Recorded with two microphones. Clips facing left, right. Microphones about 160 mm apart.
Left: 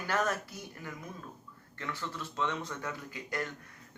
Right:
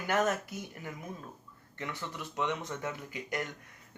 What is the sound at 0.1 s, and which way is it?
Speech, 20° right (ahead or behind).